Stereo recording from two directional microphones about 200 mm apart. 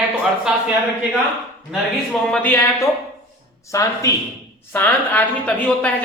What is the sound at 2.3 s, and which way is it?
A woman's voice, 10° left (ahead or behind).